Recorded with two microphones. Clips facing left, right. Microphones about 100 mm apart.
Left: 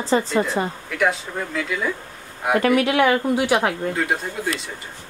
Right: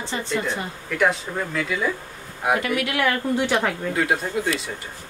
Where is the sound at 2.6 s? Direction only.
40° left (ahead or behind).